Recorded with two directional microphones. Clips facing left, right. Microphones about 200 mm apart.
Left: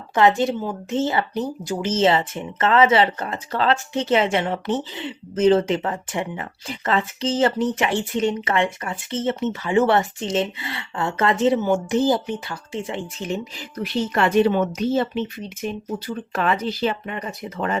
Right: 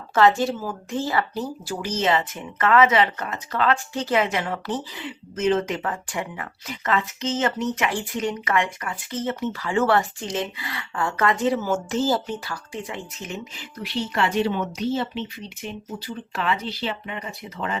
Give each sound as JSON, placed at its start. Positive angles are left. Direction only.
{"t": 0.1, "sound": "speech", "side_deg": 20}